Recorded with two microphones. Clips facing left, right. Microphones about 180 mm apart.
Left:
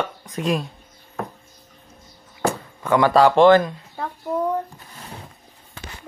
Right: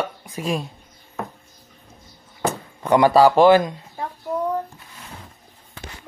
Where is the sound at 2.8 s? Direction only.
15° right (ahead or behind).